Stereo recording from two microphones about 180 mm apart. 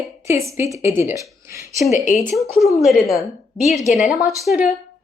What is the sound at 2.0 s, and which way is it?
Speech, 45° left (ahead or behind).